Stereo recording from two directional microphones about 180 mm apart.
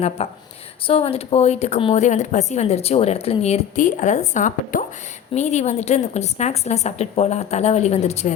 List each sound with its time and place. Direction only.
0.2 s speech: 35° left (ahead or behind)